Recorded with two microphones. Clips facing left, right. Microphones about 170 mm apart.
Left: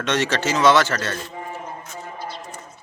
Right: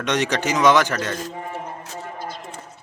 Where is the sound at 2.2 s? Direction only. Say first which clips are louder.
Right 1 dB; 45° right (ahead or behind).